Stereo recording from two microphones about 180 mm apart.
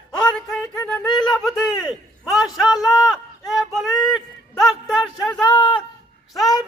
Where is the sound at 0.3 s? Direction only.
5° left (ahead or behind).